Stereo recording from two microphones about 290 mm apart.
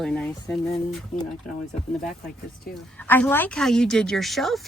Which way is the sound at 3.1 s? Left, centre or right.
Centre.